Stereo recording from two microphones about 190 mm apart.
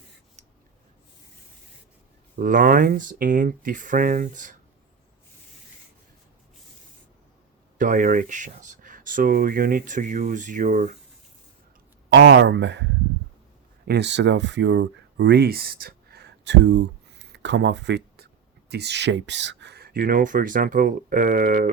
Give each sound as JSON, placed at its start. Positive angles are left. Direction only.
{"t": 2.3, "sound": "speech", "side_deg": -45}
{"t": 7.8, "sound": "speech", "side_deg": -45}
{"t": 12.1, "sound": "speech", "side_deg": -70}